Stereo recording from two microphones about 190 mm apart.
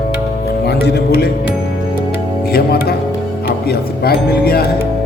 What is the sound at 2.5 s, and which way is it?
Speech, 55° left (ahead or behind).